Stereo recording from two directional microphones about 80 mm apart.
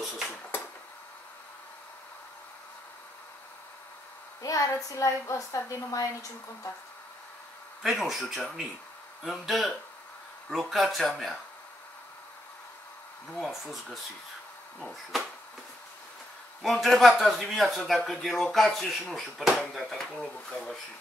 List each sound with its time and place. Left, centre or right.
4.4 s a woman's voice: left
7.8 s speech: centre
13.3 s speech: centre
14.8 s speech: centre
16.6 s speech: centre